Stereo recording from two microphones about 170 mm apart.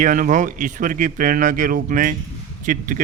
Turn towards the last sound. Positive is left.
turn(degrees=-50)  # may be behind; listen again after turning